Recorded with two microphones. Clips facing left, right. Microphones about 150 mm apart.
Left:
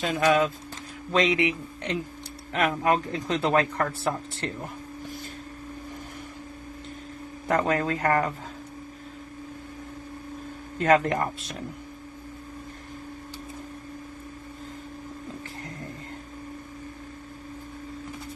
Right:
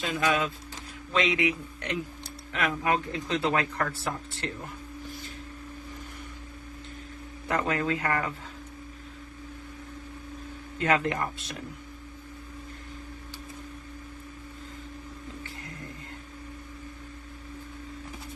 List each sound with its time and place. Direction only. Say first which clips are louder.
0.0 s speech: left 5 dB; 40° left (ahead or behind)
7.4 s speech: left 4 dB; 40° left (ahead or behind)
10.8 s speech: left 5 dB; 35° left (ahead or behind)